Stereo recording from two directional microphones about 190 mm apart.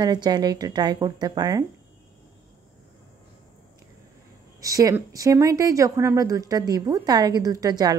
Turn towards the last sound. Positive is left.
turn(degrees=-20)  # may be behind; listen again after turning